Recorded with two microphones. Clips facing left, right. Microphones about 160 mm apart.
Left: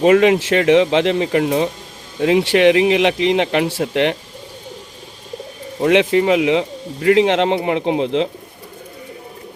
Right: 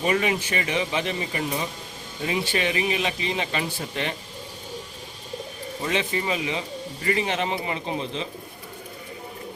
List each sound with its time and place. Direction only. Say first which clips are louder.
0.0 s speech: left 12 dB; 75° left (ahead or behind)
2.2 s speech: left 13 dB; 80° left
5.8 s speech: left 13 dB; 80° left